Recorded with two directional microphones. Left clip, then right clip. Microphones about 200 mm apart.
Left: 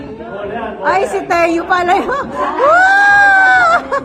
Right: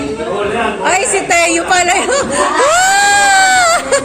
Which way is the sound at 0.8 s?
10° left (ahead or behind).